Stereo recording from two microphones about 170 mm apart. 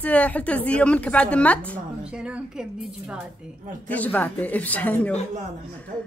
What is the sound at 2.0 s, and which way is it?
Speech, 5° right (ahead or behind).